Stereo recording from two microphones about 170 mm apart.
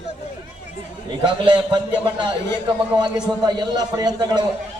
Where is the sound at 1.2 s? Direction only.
25° right (ahead or behind).